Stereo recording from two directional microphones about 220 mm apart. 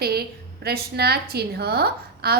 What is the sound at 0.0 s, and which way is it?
A woman's voice, 45° right (ahead or behind).